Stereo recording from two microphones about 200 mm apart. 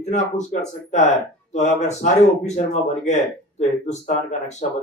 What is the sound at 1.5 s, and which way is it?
Speech, 35° left (ahead or behind).